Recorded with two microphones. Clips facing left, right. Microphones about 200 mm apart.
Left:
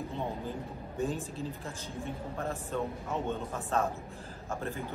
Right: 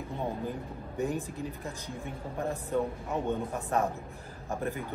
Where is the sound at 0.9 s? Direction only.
15° right (ahead or behind).